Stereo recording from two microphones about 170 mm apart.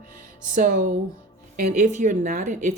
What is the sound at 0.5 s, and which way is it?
Speech, 50° right (ahead or behind).